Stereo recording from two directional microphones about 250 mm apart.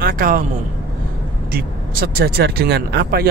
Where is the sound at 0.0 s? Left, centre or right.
Right.